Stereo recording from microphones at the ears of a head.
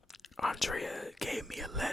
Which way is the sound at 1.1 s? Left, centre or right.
Centre.